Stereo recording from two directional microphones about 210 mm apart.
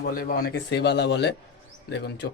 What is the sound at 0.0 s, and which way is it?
Speech, 45° left (ahead or behind).